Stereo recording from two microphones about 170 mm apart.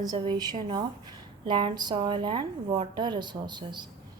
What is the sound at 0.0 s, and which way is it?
A woman's voice, 25° right (ahead or behind).